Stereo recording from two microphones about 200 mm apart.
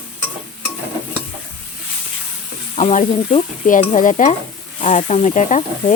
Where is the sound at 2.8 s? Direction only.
35° left (ahead or behind).